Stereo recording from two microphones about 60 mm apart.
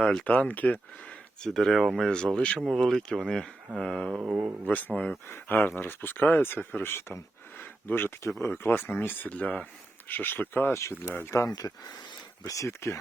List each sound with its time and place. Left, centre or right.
0.0 s speech: centre
0.3 s speech: left
1.4 s speech: centre
2.0 s speech: centre
2.6 s speech: centre
4.2 s speech: right
4.6 s speech: left
7.6 s a sound: left
8.4 s speech: left
9.3 s speech: left
10.8 s speech: left
11.4 s speech: left
12.5 s speech: left